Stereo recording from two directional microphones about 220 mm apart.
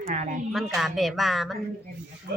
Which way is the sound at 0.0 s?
35° right (ahead or behind).